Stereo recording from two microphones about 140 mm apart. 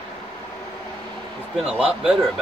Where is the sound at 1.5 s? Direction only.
10° right (ahead or behind).